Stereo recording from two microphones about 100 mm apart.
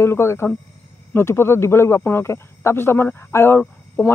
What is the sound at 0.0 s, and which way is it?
Speech, 25° left (ahead or behind).